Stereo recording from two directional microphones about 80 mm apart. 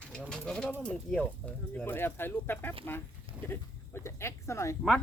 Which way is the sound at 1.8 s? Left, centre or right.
Left.